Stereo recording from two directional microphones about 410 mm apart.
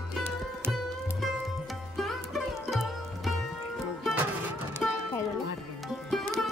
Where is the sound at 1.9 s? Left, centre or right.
Centre.